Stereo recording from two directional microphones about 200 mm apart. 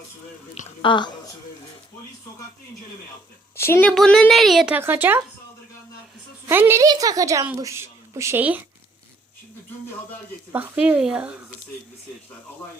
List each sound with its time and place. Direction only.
0.8 s a woman's voice: 25° left (ahead or behind)
3.5 s a woman's voice: 10° left (ahead or behind); by 5.2 s 10° right (ahead or behind)
6.5 s a woman's voice: 10° right (ahead or behind)
10.5 s a woman's voice: 10° right (ahead or behind)